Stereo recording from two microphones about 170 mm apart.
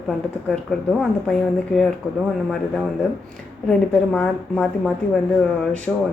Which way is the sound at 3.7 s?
5° left (ahead or behind).